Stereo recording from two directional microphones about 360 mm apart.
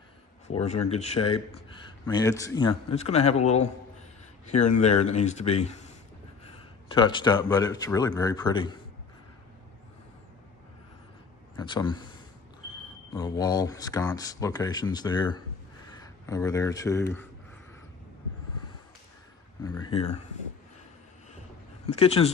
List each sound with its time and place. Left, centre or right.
0.5 s speech: centre
11.5 s a man's voice: centre
13.1 s speech: centre
19.6 s speech: centre
21.8 s speech: centre